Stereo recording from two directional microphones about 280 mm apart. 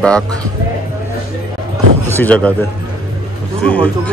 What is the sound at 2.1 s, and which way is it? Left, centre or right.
A man's voice, centre.